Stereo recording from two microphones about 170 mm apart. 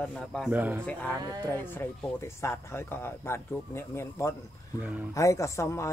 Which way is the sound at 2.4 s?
15° left (ahead or behind).